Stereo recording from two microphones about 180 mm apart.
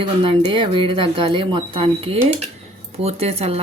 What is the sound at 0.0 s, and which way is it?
Speech, 30° right (ahead or behind).